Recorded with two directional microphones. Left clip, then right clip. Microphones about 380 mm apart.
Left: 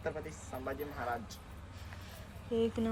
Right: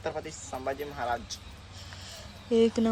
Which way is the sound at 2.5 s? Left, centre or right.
Centre.